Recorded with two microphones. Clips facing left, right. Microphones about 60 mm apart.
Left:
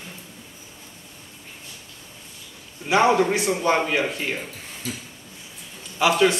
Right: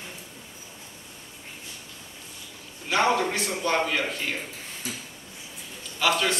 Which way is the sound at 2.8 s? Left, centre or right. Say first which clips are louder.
Left 5 dB; centre.